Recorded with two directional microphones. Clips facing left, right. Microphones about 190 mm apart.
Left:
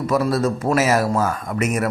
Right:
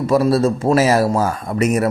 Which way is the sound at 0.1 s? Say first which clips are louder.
Right 5 dB; 30° right (ahead or behind).